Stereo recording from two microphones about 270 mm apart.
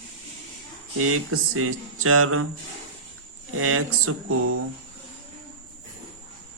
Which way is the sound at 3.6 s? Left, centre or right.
Right.